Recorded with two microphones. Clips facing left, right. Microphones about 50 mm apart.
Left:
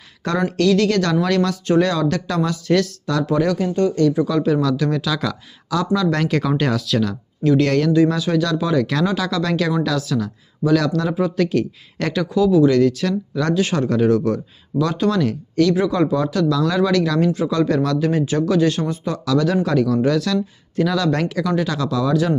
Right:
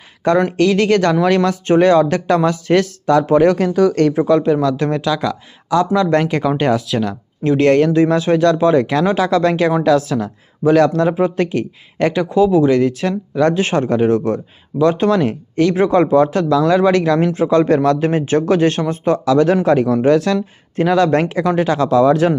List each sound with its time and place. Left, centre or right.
0.2 s speech: right
3.6 s speech: right
4.4 s speech: centre
4.8 s speech: right
5.0 s speech: centre
6.0 s speech: right
6.2 s speech: centre; by 8.9 s right
8.9 s speech: right
11.4 s speech: right
12.3 s speech: right